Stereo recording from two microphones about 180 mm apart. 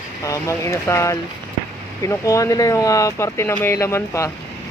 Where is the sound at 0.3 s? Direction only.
15° left (ahead or behind).